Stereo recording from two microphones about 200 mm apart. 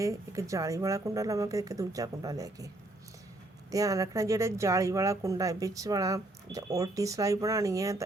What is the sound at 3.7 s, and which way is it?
Speech, 15° right (ahead or behind).